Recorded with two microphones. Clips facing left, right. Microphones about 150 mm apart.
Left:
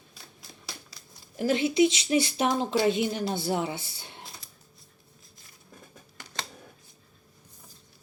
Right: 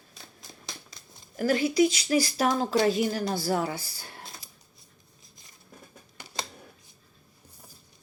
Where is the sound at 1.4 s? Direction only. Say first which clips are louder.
Even; 25° left (ahead or behind).